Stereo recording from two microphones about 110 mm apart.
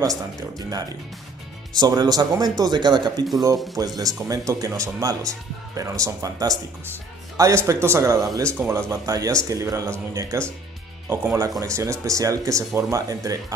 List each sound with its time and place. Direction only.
0.0 s speech: 30° right (ahead or behind)
9.0 s speech: 30° right (ahead or behind)
11.6 s speech: 25° right (ahead or behind)